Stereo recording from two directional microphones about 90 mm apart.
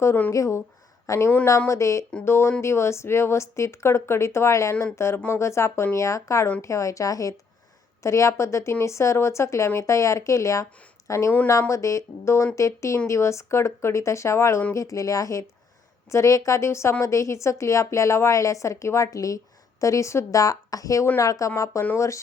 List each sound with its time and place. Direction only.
0.3 s a woman's voice: 35° left (ahead or behind)